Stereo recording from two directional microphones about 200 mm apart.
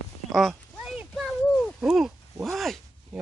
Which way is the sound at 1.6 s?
Centre (ahead or behind).